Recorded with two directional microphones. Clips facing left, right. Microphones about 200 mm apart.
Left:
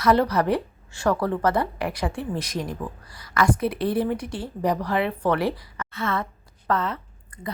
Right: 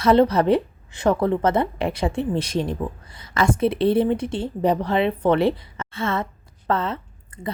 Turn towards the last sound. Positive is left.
turn(degrees=-25)  # may be behind; listen again after turning